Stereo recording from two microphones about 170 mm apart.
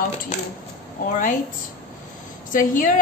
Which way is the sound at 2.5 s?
55° left (ahead or behind).